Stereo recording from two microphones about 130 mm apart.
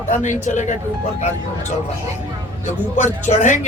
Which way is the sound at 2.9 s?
65° left (ahead or behind).